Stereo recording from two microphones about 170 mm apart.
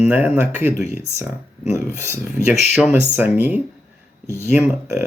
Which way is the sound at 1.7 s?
15° right (ahead or behind).